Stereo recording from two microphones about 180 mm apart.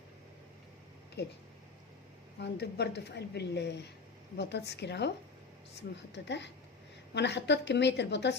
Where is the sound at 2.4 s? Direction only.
70° left (ahead or behind).